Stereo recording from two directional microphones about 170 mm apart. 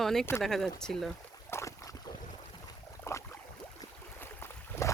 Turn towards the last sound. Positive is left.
turn(degrees=15)  # may be behind; listen again after turning